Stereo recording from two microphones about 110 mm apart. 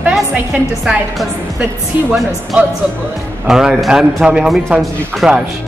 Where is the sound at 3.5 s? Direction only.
5° right (ahead or behind).